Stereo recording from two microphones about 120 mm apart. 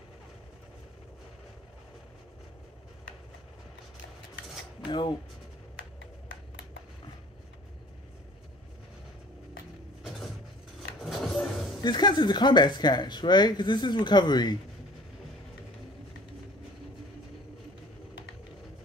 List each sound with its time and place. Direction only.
4.8 s speech: 45° left (ahead or behind)
11.0 s vehicle: centre (ahead or behind)
11.8 s speech: 40° left (ahead or behind)